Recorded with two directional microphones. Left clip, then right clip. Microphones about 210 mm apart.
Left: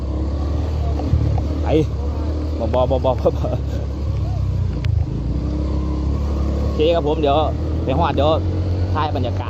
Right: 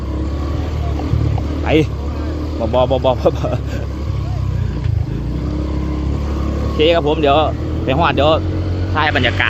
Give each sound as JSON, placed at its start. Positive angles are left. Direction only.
{"t": 1.7, "sound": "speech", "side_deg": 10}
{"t": 2.7, "sound": "speech", "side_deg": -15}
{"t": 6.7, "sound": "speech", "side_deg": -15}